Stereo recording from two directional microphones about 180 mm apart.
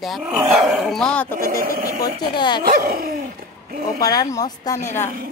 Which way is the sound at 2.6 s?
55° right (ahead or behind).